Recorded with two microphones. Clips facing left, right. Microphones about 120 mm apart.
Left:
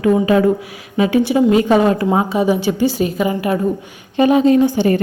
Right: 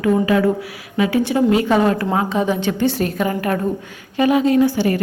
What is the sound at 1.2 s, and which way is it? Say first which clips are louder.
A woman's voice: left 3 dB; 15° left (ahead or behind).